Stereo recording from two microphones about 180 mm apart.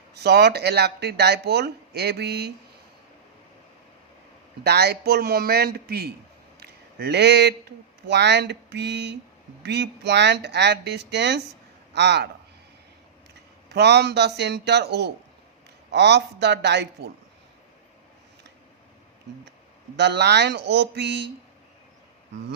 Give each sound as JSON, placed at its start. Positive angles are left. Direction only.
{"t": 0.1, "sound": "speech", "side_deg": -65}
{"t": 4.6, "sound": "speech", "side_deg": -65}
{"t": 13.7, "sound": "speech", "side_deg": -70}
{"t": 20.0, "sound": "speech", "side_deg": -70}